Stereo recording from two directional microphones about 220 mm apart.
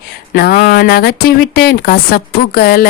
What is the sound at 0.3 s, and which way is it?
Speech, 45° left (ahead or behind).